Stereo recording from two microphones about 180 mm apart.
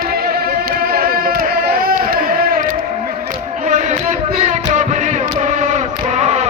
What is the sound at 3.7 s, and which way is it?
Music, 40° right (ahead or behind).